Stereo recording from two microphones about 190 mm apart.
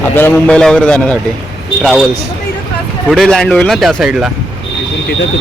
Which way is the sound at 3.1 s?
Centre (ahead or behind).